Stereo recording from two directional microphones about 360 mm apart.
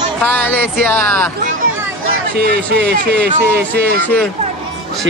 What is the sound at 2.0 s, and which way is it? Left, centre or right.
Speech, right.